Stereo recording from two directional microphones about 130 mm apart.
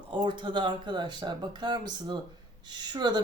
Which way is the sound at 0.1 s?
40° right (ahead or behind).